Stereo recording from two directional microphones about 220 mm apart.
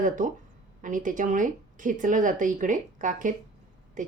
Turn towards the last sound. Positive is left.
turn(degrees=-35)  # may be behind; listen again after turning